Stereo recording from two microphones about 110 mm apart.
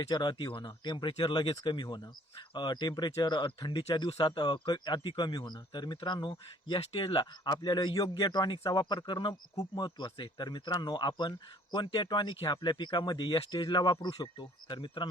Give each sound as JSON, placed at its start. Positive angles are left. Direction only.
{"t": 0.0, "sound": "a man's voice", "side_deg": 40}